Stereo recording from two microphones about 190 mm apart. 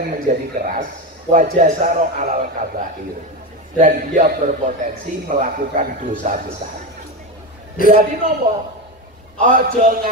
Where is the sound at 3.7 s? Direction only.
40° right (ahead or behind).